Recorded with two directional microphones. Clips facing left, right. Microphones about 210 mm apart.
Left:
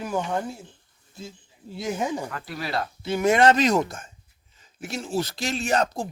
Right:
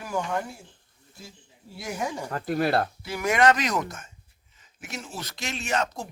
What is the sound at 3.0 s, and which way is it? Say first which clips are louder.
Speech: left 7 dB; 25° left (ahead or behind).